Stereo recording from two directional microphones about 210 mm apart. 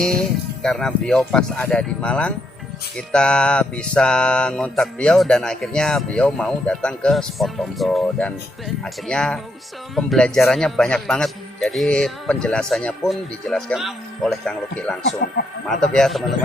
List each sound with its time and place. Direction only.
0.0 s mantra: 5° left (ahead or behind)
15.2 s speech: 50° left (ahead or behind)
15.6 s mantra: centre (ahead or behind)